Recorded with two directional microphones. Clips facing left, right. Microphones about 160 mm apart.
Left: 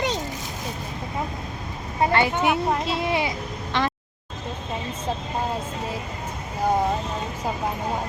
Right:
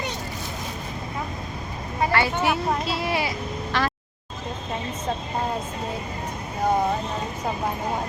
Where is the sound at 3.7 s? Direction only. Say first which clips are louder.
Left 1 dB; 20° left (ahead or behind).